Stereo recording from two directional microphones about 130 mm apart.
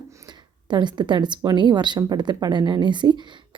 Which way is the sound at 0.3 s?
35° right (ahead or behind).